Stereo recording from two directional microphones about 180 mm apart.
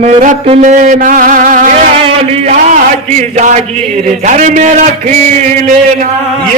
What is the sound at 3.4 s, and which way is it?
Music, 40° right (ahead or behind).